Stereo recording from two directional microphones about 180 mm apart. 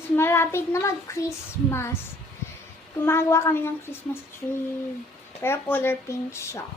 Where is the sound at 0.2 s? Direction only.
15° left (ahead or behind).